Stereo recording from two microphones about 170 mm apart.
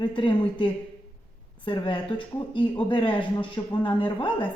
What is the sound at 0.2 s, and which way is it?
A woman's voice, 30° left (ahead or behind).